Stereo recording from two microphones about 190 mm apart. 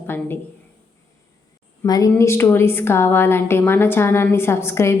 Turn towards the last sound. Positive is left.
turn(degrees=15)  # may be behind; listen again after turning